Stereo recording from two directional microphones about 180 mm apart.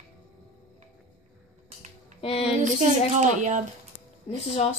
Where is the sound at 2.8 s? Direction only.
45° right (ahead or behind).